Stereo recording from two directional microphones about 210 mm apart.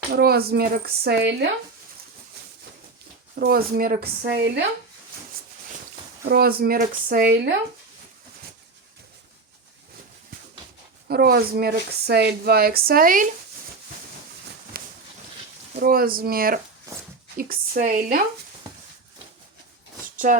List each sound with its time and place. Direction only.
0.1 s speech: 50° right (ahead or behind)
3.3 s speech: 45° right (ahead or behind)
6.2 s speech: 50° right (ahead or behind)
11.1 s speech: 50° right (ahead or behind)
14.8 s a sound: 45° right (ahead or behind)
15.7 s a woman's voice: 45° right (ahead or behind)
20.1 s speech: 40° right (ahead or behind)